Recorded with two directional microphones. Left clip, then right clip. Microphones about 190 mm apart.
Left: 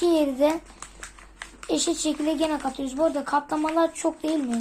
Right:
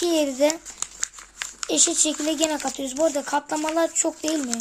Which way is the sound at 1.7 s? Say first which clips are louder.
Right 3 dB; 25° right (ahead or behind).